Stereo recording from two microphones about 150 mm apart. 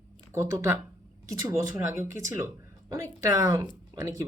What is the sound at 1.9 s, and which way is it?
Speech, 20° right (ahead or behind).